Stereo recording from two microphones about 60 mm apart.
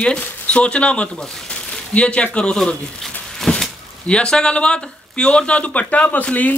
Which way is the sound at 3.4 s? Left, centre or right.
Centre.